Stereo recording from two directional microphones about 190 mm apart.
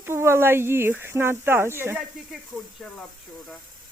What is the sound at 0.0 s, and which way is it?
Speech, 15° right (ahead or behind).